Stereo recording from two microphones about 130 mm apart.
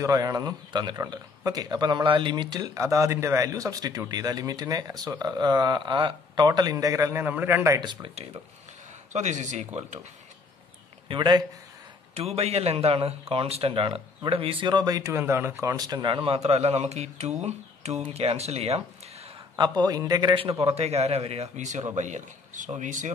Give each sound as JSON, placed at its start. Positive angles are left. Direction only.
{"t": 0.0, "sound": "a man's voice", "side_deg": -25}
{"t": 2.7, "sound": "a man's voice", "side_deg": -25}
{"t": 7.8, "sound": "speech", "side_deg": -35}
{"t": 9.1, "sound": "a man's voice", "side_deg": -65}
{"t": 11.1, "sound": "speech", "side_deg": -35}
{"t": 12.1, "sound": "a man's voice", "side_deg": -50}
{"t": 19.6, "sound": "a man's voice", "side_deg": -30}
{"t": 20.3, "sound": "a man's voice", "side_deg": -45}